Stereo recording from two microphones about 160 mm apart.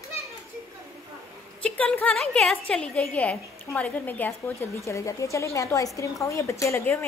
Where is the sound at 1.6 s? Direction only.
10° left (ahead or behind).